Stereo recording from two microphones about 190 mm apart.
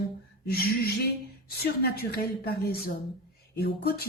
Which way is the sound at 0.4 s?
55° left (ahead or behind).